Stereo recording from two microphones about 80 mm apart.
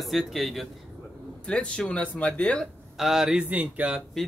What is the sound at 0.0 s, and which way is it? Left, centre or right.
Speech, centre.